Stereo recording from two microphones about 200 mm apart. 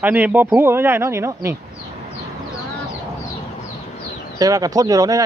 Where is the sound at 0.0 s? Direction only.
10° right (ahead or behind).